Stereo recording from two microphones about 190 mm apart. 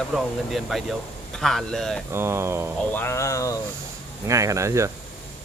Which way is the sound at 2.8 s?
10° left (ahead or behind).